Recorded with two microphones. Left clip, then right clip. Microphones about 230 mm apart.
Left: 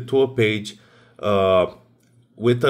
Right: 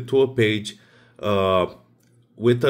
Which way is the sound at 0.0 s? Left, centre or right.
Centre.